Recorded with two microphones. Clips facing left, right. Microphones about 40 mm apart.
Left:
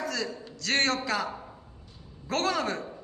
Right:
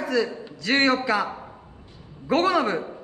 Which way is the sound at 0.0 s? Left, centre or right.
Centre.